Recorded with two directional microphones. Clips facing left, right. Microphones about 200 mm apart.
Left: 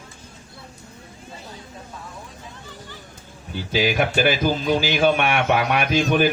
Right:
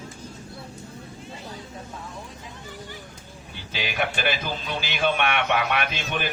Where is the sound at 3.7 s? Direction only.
45° left (ahead or behind).